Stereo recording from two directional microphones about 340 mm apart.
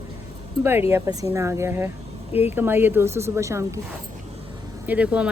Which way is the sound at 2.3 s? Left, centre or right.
Centre.